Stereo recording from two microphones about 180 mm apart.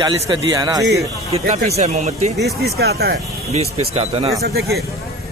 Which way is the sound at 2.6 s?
60° right (ahead or behind).